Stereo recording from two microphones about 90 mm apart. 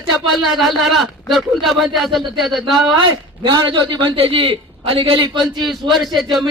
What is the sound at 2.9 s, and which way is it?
A man's voice, 60° right (ahead or behind).